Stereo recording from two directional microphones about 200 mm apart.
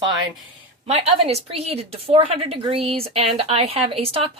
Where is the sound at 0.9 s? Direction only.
30° right (ahead or behind).